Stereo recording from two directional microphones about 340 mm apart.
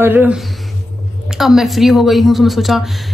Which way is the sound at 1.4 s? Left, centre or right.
Centre.